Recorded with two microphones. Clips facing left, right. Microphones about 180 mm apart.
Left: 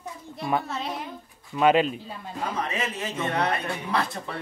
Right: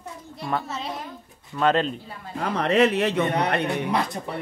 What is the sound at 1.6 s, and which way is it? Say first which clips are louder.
Speech: left 1 dB; 10° left (ahead or behind).